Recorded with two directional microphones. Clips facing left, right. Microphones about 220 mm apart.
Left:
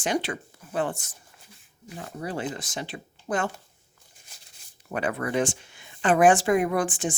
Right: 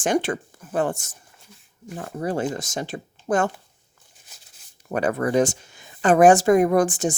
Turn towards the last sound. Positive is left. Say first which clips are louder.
# right 7 dB
turn(degrees=-40)  # may be behind; listen again after turning